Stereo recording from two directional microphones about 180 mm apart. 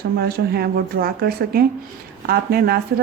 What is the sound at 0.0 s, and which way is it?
A woman's voice, 60° right (ahead or behind).